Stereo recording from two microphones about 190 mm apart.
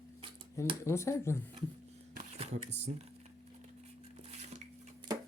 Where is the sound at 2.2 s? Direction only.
35° right (ahead or behind).